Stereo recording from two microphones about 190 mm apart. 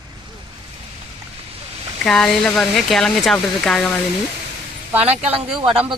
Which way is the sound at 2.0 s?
5° left (ahead or behind).